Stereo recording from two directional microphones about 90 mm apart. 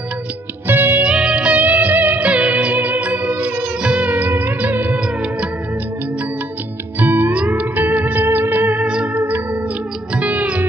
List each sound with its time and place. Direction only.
0.7 s music: 20° right (ahead or behind)
7.0 s music: 20° right (ahead or behind)